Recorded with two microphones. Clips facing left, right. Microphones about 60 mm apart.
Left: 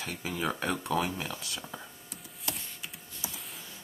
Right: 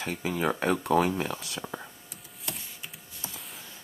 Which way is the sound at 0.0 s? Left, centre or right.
Right.